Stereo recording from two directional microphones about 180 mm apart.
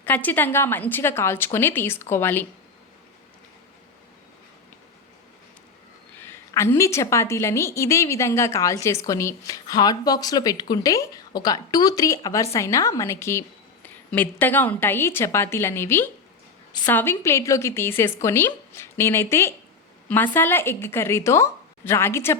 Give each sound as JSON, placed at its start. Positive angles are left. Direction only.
{"t": 0.0, "sound": "a woman's voice", "side_deg": 10}
{"t": 6.1, "sound": "a woman's voice", "side_deg": 15}